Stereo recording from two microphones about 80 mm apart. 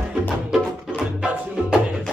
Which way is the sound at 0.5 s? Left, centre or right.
Centre.